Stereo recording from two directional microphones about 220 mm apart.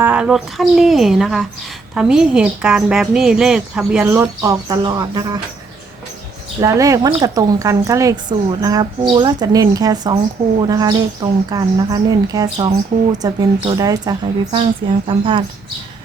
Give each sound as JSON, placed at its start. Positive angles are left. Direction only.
{"t": 0.0, "sound": "speech", "side_deg": -5}
{"t": 6.6, "sound": "a woman's voice", "side_deg": -15}